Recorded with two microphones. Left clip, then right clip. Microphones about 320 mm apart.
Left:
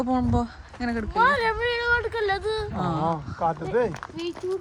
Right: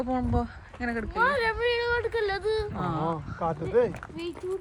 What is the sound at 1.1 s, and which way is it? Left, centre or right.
Speech, left.